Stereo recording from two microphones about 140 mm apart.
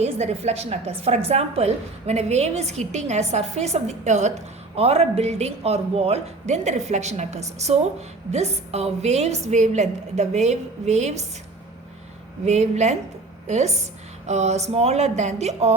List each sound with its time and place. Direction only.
0.0 s a woman's voice: 50° right (ahead or behind)
12.5 s a woman's voice: 55° right (ahead or behind)